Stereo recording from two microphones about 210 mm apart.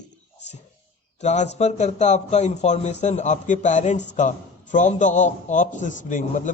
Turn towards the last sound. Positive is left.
turn(degrees=35)  # may be behind; listen again after turning